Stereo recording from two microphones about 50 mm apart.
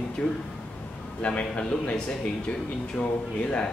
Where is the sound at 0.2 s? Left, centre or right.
Left.